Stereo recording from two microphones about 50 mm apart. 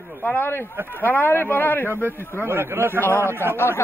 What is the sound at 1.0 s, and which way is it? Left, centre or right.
Speech, left.